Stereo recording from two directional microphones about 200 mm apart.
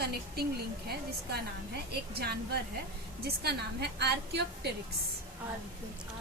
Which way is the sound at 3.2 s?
55° right (ahead or behind).